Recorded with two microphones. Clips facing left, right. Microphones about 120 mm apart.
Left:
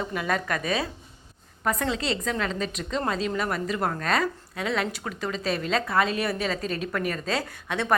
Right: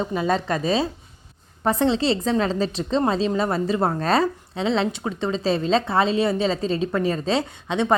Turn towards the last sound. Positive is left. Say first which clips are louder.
# right 5 dB
turn(degrees=-20)  # may be behind; listen again after turning